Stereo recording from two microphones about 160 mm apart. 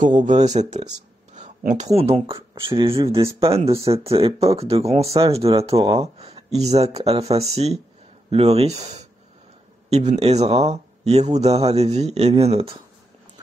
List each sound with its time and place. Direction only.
0.0 s speech: 50° right (ahead or behind)
2.0 s speech: 35° right (ahead or behind)
5.8 s speech: 20° right (ahead or behind)
6.1 s speech: 40° right (ahead or behind)